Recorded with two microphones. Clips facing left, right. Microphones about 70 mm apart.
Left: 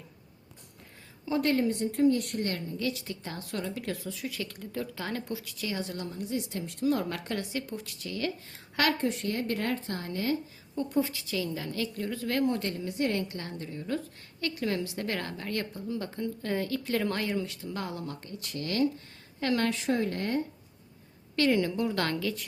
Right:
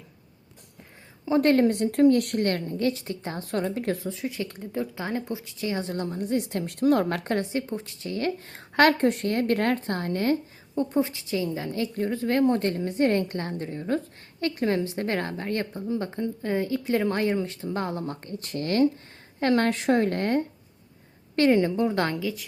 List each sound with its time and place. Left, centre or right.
1.4 s a woman's voice: right
2.7 s a woman's voice: right
10.8 s a woman's voice: right
21.3 s a woman's voice: right
22.1 s a woman's voice: centre